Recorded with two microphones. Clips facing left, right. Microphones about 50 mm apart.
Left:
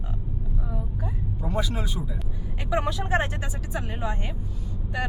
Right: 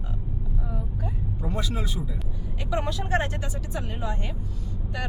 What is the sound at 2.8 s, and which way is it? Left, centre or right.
Speech, centre.